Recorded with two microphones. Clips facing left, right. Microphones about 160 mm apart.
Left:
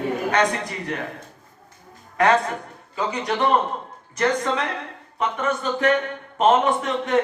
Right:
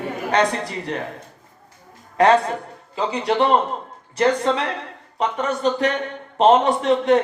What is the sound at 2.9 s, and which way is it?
Speech, 30° right (ahead or behind).